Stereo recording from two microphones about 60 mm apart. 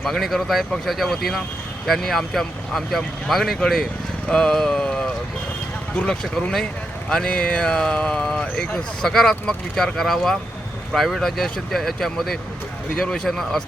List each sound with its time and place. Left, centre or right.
0.0 s speech: centre
4.3 s a sound: centre
6.0 s speech: centre